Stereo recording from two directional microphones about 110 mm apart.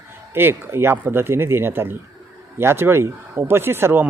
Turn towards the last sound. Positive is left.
turn(degrees=-20)  # may be behind; listen again after turning